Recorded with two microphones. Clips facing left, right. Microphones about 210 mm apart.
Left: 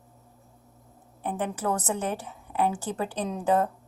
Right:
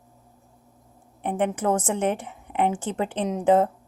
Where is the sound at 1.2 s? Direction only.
65° right (ahead or behind).